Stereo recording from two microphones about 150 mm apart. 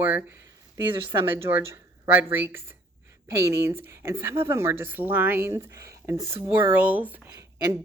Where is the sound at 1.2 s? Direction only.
15° right (ahead or behind).